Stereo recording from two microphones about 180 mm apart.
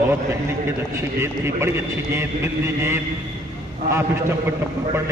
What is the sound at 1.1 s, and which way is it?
A man's voice, 15° right (ahead or behind).